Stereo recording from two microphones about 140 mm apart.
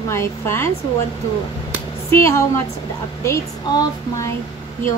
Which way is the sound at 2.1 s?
20° left (ahead or behind).